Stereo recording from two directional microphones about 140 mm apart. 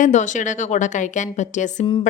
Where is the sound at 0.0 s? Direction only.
60° left (ahead or behind).